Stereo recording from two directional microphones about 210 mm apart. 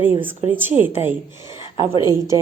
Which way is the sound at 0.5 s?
10° right (ahead or behind).